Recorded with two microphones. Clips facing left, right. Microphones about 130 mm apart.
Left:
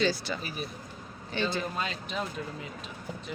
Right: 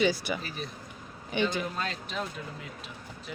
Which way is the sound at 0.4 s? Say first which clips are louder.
Left 1 dB; 10° left (ahead or behind).